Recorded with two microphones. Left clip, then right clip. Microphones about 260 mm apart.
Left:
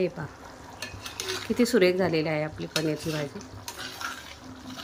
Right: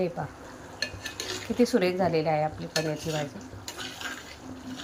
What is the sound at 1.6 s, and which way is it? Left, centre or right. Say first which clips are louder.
A woman's voice: left 2 dB; centre.